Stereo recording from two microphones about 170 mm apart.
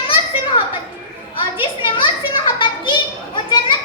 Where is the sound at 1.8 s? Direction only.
30° left (ahead or behind).